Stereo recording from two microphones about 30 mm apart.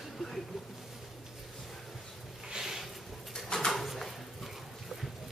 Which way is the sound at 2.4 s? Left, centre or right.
Right.